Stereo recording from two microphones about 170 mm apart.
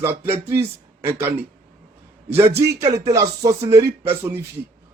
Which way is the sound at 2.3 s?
15° right (ahead or behind).